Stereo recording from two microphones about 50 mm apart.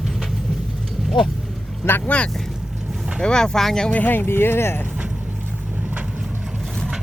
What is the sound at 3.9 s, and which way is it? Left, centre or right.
Speech, left.